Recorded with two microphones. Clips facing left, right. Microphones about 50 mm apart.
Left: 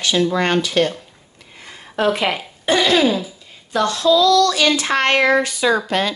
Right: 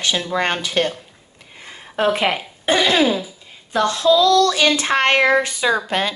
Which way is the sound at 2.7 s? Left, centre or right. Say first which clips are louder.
Left 1 dB; centre.